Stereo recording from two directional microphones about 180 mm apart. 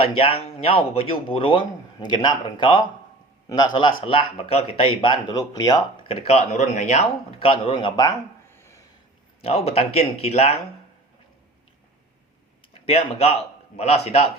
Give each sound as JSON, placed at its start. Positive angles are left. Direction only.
{"t": 0.0, "sound": "a man's voice", "side_deg": 30}
{"t": 9.4, "sound": "speech", "side_deg": 35}
{"t": 12.7, "sound": "speech", "side_deg": 35}